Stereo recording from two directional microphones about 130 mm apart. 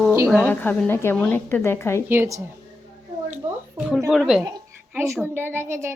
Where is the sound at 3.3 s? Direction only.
5° right (ahead or behind).